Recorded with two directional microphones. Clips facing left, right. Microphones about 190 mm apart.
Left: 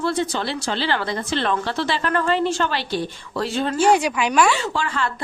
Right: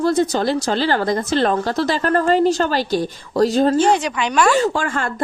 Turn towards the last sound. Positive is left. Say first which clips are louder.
# right 3 dB
turn(degrees=-50)  # may be behind; listen again after turning